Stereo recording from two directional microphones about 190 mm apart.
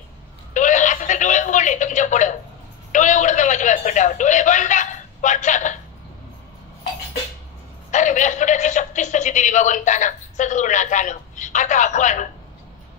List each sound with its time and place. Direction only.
0.6 s telephone: 40° left (ahead or behind)
2.9 s a man's voice: 40° left (ahead or behind)
7.9 s a man's voice: 40° left (ahead or behind)